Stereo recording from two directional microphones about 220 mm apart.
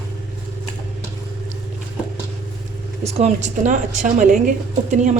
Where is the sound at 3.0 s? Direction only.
30° right (ahead or behind).